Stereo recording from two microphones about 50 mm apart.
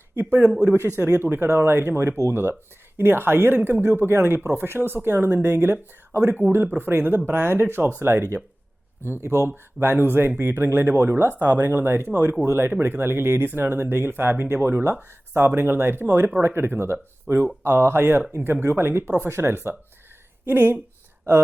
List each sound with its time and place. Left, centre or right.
0.2 s speech: right
0.8 s speech: right
9.8 s speech: right